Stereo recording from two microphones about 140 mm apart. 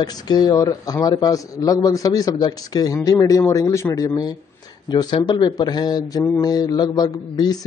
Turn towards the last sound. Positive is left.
turn(degrees=30)  # may be behind; listen again after turning